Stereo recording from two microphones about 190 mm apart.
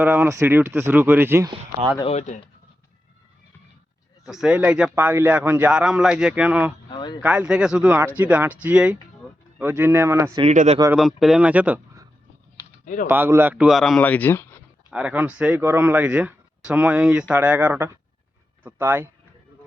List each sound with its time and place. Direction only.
0.0 s speech: 10° right (ahead or behind)
2.0 s speech: 40° left (ahead or behind)
4.3 s a man's voice: 5° right (ahead or behind)
6.9 s a sound: 20° left (ahead or behind)
7.2 s a man's voice: 5° right (ahead or behind)
10.5 s speech: 40° right (ahead or behind)
10.9 s speech: centre (ahead or behind)
12.8 s a sound: 45° left (ahead or behind)
13.1 s a man's voice: 10° right (ahead or behind); by 14.4 s 10° left (ahead or behind)
14.8 s speech: 5° right (ahead or behind)